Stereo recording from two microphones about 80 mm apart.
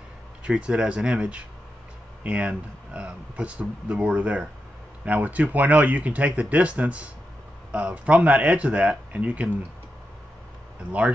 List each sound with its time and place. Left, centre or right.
0.4 s speech: centre
10.9 s speech: centre